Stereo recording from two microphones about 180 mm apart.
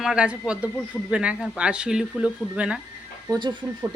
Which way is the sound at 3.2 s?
25° right (ahead or behind).